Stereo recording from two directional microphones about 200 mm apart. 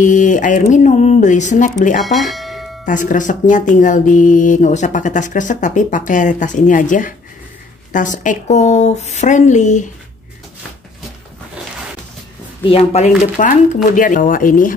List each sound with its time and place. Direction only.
0.0 s speech: 40° left (ahead or behind)
2.0 s bell: centre (ahead or behind)
2.8 s speech: 40° left (ahead or behind)
12.6 s speech: 30° left (ahead or behind)